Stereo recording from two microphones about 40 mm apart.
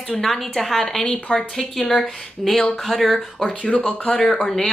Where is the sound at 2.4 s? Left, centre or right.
Centre.